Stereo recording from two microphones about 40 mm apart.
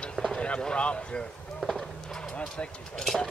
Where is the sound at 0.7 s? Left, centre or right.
Left.